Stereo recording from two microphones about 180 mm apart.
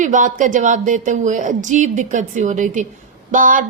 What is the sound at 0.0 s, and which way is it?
A woman's voice, 45° right (ahead or behind).